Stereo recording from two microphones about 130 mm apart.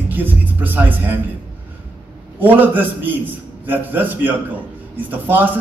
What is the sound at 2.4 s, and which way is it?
Speech, 15° right (ahead or behind).